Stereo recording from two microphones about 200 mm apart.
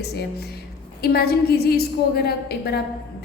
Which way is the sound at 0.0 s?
55° left (ahead or behind).